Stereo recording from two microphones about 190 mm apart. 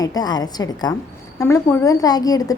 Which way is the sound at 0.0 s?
20° left (ahead or behind).